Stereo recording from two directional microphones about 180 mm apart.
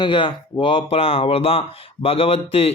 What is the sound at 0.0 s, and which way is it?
Speech, 25° left (ahead or behind).